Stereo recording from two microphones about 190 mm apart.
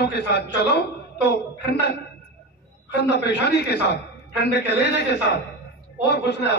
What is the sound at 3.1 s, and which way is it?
Speech, 65° left (ahead or behind).